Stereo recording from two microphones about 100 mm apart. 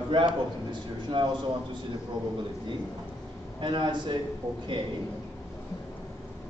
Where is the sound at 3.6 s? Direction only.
50° right (ahead or behind).